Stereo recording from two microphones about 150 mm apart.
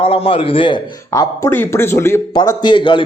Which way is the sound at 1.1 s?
20° left (ahead or behind).